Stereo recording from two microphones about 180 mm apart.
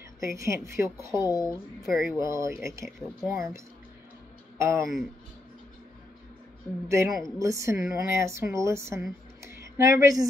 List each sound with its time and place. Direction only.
0.2 s speech: 15° right (ahead or behind)
6.9 s speech: 15° right (ahead or behind)
9.4 s a sound: 15° right (ahead or behind)